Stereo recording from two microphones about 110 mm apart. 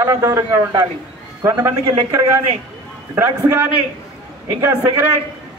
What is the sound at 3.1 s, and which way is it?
Speech, 25° right (ahead or behind).